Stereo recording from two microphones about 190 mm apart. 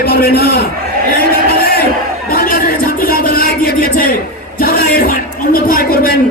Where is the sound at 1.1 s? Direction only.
55° left (ahead or behind).